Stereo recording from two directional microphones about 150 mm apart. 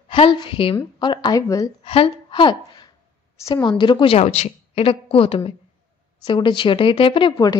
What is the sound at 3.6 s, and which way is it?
A woman's voice, 30° left (ahead or behind).